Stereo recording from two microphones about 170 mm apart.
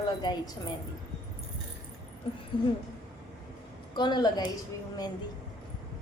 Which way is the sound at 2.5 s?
30° left (ahead or behind).